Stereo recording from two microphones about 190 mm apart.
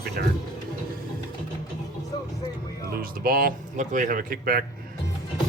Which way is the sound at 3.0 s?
50° right (ahead or behind).